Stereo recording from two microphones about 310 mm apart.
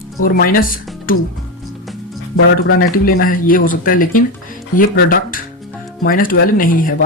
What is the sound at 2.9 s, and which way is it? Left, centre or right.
Speech, left.